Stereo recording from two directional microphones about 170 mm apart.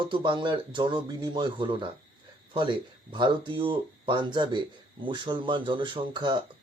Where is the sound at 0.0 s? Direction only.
30° right (ahead or behind).